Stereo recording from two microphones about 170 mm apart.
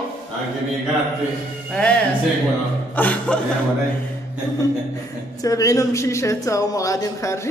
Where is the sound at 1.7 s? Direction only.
5° left (ahead or behind).